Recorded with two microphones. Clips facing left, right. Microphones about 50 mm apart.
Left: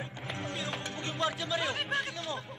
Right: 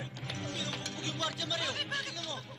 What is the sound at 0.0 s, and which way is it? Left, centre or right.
Music, centre.